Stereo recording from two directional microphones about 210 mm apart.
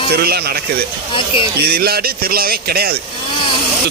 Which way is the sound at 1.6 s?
50° right (ahead or behind).